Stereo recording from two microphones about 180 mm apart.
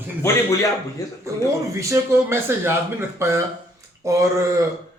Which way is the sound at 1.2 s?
15° right (ahead or behind).